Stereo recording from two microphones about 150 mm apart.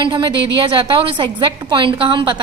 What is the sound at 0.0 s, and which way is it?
A woman's voice, 30° right (ahead or behind).